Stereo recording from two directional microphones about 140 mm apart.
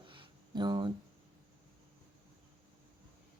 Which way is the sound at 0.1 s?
35° right (ahead or behind).